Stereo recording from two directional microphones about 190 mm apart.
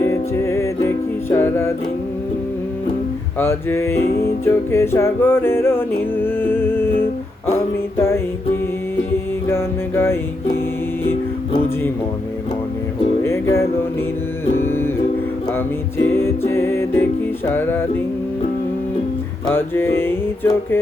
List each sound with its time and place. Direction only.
0.0 s music: 15° left (ahead or behind)
3.3 s music: 10° left (ahead or behind)
4.0 s music: 55° left (ahead or behind)
4.4 s music: 15° left (ahead or behind)
9.5 s music: 10° left (ahead or behind)
13.2 s music: 15° left (ahead or behind)
16.0 s music: 15° left (ahead or behind)
19.5 s music: 10° left (ahead or behind)